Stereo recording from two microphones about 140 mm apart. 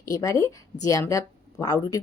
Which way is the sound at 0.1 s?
25° left (ahead or behind).